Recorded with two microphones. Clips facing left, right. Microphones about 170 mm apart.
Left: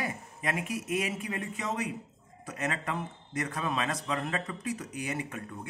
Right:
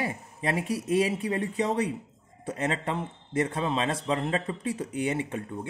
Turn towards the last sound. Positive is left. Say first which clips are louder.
# right 6 dB
turn(degrees=-25)  # may be behind; listen again after turning